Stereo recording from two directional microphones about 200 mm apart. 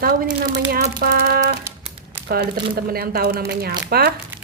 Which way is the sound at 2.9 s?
50° right (ahead or behind).